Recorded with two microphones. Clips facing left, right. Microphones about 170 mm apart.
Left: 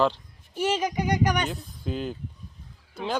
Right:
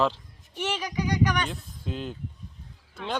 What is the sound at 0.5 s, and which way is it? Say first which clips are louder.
Speech: left 4 dB; 45° left (ahead or behind).